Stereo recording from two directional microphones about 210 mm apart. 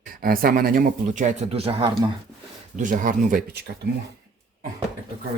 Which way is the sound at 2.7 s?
40° right (ahead or behind).